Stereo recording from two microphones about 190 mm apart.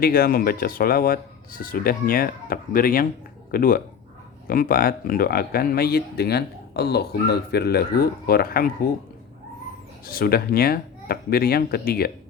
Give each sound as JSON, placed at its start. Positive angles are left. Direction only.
{"t": 0.0, "sound": "speech", "side_deg": 50}
{"t": 10.1, "sound": "speech", "side_deg": 50}